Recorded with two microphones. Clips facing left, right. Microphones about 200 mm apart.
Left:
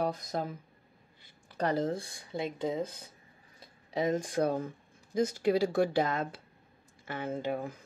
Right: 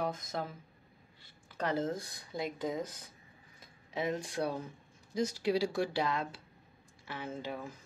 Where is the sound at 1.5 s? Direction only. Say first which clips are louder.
Left 3 dB; 35° left (ahead or behind).